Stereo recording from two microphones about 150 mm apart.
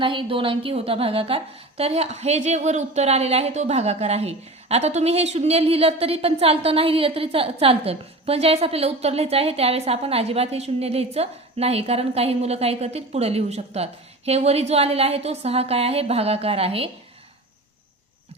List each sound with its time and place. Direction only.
0.0 s a woman's voice: 35° right (ahead or behind)